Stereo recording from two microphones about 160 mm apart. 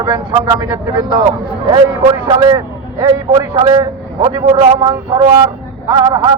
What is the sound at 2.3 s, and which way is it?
A man's voice, 25° right (ahead or behind).